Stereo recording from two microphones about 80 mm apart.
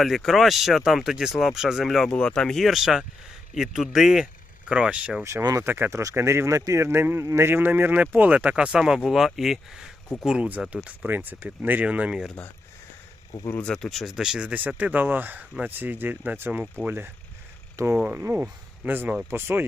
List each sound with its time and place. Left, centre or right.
0.0 s speech: centre
2.1 s speech: centre
5.2 s speech: right
6.0 s speech: right; by 12.2 s centre
13.5 s speech: centre
13.7 s speech: centre; by 19.6 s right